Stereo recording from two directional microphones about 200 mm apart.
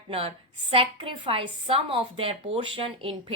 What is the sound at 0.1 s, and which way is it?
A woman's voice, 30° right (ahead or behind).